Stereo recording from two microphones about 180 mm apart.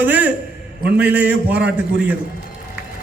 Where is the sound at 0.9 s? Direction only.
10° right (ahead or behind).